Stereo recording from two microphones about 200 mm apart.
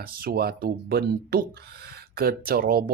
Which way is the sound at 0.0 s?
50° right (ahead or behind).